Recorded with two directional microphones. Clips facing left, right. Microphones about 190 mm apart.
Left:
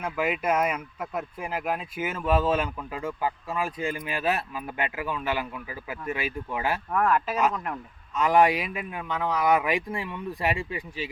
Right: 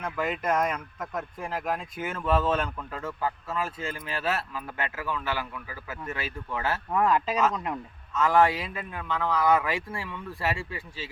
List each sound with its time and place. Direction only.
0.0 s speech: 10° left (ahead or behind)
6.9 s speech: 15° right (ahead or behind)
8.1 s speech: 15° left (ahead or behind)